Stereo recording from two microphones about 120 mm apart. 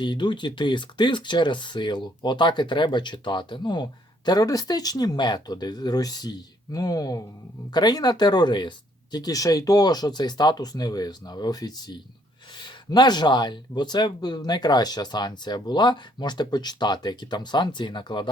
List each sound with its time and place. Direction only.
0.0 s speech: 40° left (ahead or behind)